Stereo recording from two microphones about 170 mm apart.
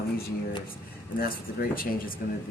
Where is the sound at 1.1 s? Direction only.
60° left (ahead or behind).